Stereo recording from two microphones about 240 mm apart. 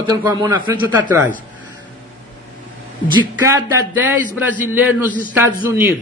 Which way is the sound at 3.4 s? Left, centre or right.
Centre.